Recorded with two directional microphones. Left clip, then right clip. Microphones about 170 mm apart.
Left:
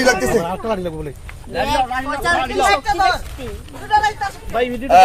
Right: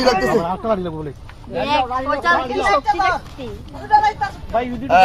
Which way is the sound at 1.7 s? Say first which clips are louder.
Right 2 dB; 90° left.